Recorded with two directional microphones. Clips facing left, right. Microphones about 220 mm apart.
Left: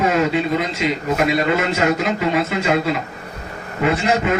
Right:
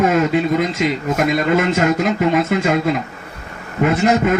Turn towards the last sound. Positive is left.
turn(degrees=-50)  # may be behind; listen again after turning